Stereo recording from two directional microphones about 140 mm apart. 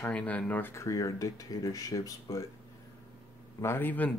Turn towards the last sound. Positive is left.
turn(degrees=10)  # may be behind; listen again after turning